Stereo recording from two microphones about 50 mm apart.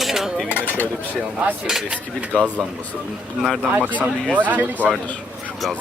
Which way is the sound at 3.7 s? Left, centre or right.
Right.